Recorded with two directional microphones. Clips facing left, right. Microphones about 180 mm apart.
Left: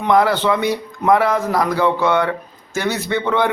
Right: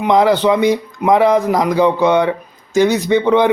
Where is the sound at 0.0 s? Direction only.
20° right (ahead or behind).